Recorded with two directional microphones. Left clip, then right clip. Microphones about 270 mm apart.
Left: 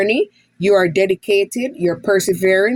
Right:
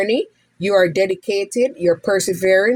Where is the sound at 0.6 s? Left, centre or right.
Centre.